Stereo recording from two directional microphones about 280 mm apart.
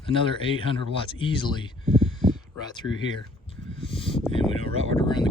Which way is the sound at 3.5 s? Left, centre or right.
Centre.